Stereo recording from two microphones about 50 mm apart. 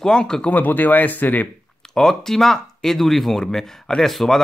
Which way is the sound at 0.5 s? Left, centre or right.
Left.